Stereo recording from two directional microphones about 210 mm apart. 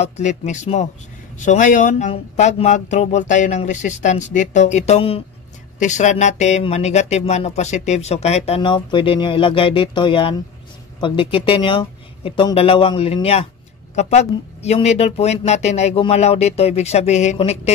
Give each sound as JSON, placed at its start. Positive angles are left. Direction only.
{"t": 0.0, "sound": "speech", "side_deg": 35}